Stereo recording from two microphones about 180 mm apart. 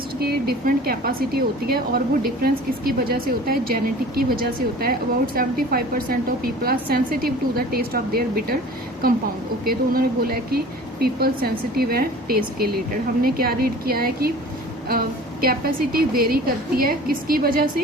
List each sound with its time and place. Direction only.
0.2 s a woman's voice: 60° right (ahead or behind)
9.6 s a woman's voice: 55° right (ahead or behind)